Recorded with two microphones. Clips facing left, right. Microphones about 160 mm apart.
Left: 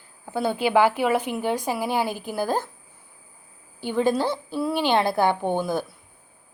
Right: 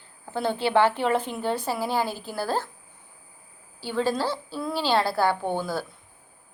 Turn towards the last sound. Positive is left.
turn(degrees=15)  # may be behind; listen again after turning